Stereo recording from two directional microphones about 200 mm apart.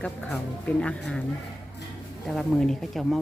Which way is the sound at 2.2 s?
Centre (ahead or behind).